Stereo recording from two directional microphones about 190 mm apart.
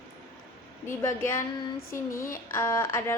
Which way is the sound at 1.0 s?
15° left (ahead or behind).